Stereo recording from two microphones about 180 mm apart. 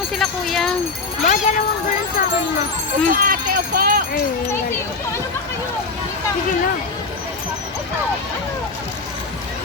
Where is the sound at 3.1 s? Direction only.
55° right (ahead or behind).